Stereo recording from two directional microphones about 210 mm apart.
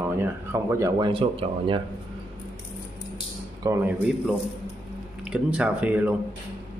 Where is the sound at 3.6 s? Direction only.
10° right (ahead or behind).